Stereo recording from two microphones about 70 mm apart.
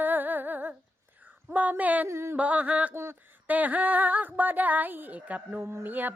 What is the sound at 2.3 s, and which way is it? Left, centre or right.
Female singing, right.